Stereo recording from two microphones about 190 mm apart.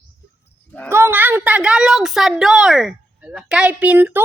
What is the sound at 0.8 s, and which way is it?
A woman's voice, 15° right (ahead or behind).